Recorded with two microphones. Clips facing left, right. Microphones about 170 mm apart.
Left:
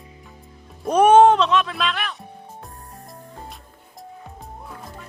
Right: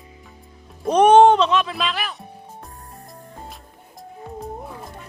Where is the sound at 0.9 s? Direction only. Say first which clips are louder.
Right 1 dB; 5° left (ahead or behind).